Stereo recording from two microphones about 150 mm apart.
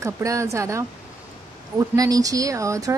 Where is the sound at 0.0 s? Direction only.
20° right (ahead or behind).